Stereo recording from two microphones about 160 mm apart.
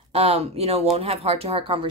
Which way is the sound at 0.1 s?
40° right (ahead or behind).